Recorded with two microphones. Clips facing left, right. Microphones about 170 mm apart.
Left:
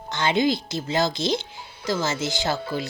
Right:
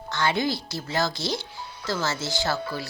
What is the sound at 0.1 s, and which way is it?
Speech, 20° left (ahead or behind).